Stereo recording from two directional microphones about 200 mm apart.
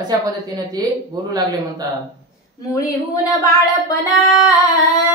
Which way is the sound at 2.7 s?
15° left (ahead or behind).